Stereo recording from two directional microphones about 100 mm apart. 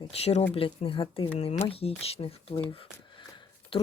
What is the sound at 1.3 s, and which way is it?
Speech, 90° left.